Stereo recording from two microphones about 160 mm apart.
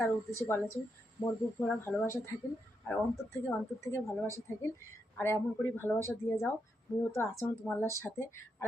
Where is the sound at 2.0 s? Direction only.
20° left (ahead or behind).